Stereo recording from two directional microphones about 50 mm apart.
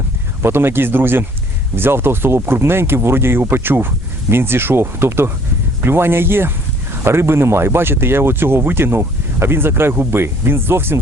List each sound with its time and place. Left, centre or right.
0.4 s speech: right